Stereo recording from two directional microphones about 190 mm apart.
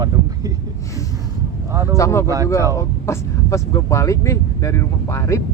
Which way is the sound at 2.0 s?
15° left (ahead or behind).